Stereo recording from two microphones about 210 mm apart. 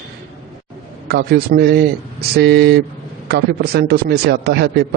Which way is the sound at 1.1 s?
45° right (ahead or behind).